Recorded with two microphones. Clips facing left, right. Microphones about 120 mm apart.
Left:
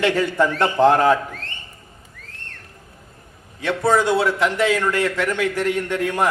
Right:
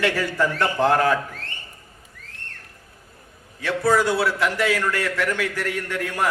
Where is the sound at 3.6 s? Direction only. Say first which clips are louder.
Left 2 dB; 20° left (ahead or behind).